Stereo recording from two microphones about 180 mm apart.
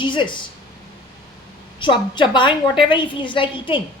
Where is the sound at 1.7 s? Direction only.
25° left (ahead or behind).